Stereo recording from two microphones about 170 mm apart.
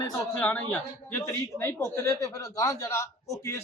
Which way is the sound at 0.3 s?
10° left (ahead or behind).